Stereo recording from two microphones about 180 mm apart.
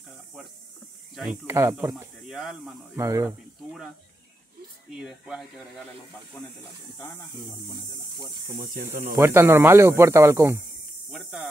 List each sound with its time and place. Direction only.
1.1 s speech: centre (ahead or behind)
1.5 s speech: 15° right (ahead or behind)
3.0 s speech: 15° right (ahead or behind)
4.9 s speech: 5° right (ahead or behind)
7.0 s speech: 15° left (ahead or behind)
9.1 s speech: 15° right (ahead or behind)
11.1 s speech: 5° right (ahead or behind)